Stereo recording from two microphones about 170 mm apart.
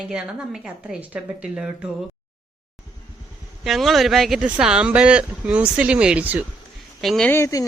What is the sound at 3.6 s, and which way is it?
A woman's voice, centre (ahead or behind).